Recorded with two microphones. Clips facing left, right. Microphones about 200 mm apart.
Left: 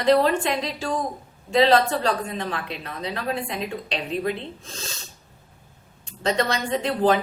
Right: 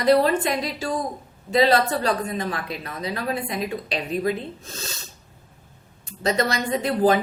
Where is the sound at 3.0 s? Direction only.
40° right (ahead or behind).